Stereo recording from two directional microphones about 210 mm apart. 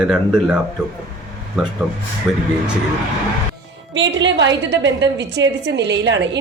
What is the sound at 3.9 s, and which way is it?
A woman's voice, 60° right (ahead or behind).